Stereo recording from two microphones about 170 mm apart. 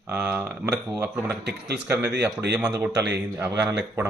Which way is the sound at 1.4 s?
80° right.